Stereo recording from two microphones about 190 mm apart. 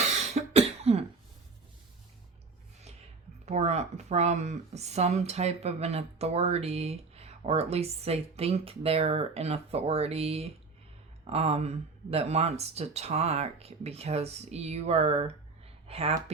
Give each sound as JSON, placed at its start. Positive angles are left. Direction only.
{"t": 0.2, "sound": "cough", "side_deg": -35}
{"t": 3.4, "sound": "speech", "side_deg": -35}